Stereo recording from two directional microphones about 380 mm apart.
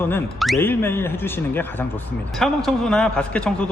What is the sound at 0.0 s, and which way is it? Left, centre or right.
A man's voice, centre.